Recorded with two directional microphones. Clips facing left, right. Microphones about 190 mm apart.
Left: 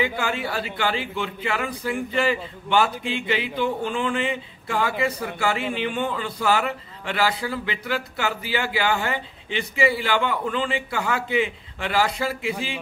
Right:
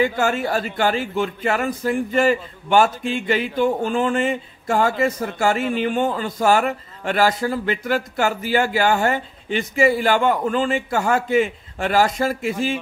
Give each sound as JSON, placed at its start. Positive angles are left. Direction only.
{"t": 0.0, "sound": "a man's voice", "side_deg": -45}